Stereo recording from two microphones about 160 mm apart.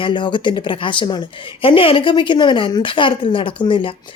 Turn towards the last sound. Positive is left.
turn(degrees=35)  # may be behind; listen again after turning